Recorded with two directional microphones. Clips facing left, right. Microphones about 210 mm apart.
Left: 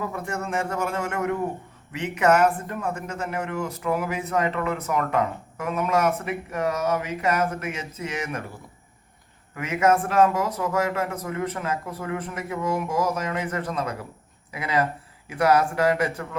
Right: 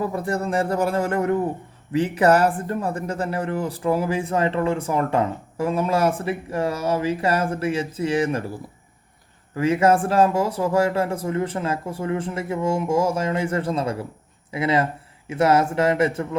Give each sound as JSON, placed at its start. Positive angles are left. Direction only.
{"t": 0.0, "sound": "speech", "side_deg": -35}
{"t": 9.6, "sound": "speech", "side_deg": -30}